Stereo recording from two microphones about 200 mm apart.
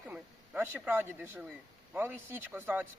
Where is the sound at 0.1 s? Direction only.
10° right (ahead or behind).